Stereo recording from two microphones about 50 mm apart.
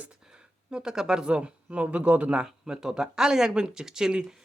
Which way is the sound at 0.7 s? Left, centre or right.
Centre.